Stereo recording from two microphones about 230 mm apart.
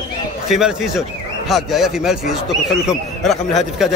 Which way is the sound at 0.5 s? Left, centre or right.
Centre.